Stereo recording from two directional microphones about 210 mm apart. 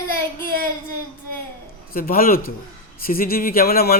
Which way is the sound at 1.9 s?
45° left (ahead or behind).